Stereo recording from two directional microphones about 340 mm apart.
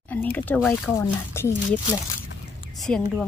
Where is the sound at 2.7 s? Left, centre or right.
Centre.